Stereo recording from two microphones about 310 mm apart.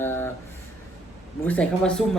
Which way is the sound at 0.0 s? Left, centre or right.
Centre.